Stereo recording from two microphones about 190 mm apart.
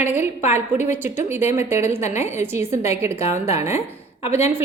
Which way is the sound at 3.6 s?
15° right (ahead or behind).